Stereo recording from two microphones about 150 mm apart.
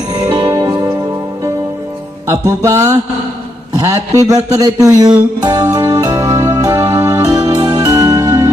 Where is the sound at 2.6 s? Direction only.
20° right (ahead or behind).